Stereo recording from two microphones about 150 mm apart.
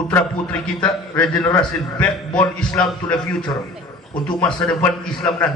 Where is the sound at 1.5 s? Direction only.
25° left (ahead or behind).